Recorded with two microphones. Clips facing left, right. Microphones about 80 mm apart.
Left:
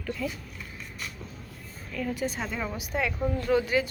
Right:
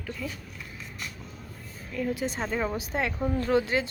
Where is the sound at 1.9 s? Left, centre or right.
Right.